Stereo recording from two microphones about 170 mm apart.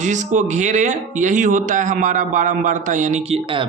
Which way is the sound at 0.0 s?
45° right (ahead or behind).